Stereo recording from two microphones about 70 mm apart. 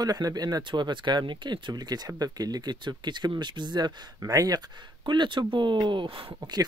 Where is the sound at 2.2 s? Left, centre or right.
Right.